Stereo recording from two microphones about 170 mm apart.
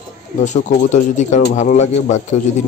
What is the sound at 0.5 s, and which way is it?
Speech, 45° left (ahead or behind).